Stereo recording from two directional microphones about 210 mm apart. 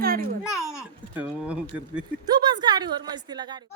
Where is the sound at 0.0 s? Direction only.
45° right (ahead or behind).